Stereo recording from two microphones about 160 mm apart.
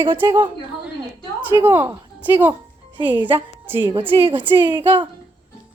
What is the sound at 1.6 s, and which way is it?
A woman's voice, 15° right (ahead or behind).